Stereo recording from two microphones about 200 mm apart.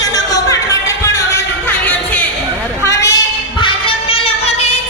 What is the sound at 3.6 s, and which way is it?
Music, 25° left (ahead or behind).